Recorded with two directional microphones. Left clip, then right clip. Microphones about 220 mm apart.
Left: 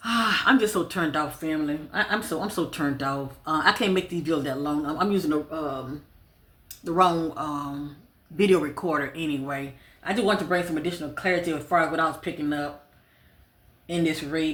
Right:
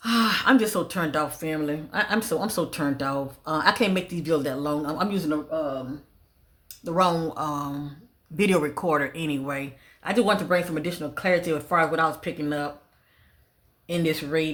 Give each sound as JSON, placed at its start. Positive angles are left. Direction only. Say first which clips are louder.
{"t": 0.0, "sound": "speech", "louder": "even", "side_deg": -45}
{"t": 6.8, "sound": "speech", "louder": "left 1 dB", "side_deg": -40}
{"t": 13.8, "sound": "speech", "louder": "even", "side_deg": -55}